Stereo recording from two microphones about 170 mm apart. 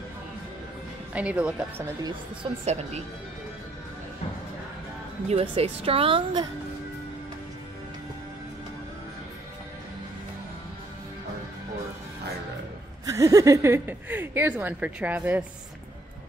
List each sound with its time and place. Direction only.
1.1 s speech: 5° right (ahead or behind)
2.6 s a woman's voice: 40° right (ahead or behind)
5.3 s a woman's voice: 35° right (ahead or behind)
13.0 s speech: 20° right (ahead or behind)